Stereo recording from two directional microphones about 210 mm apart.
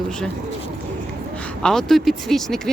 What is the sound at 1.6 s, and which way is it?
Speech, centre (ahead or behind).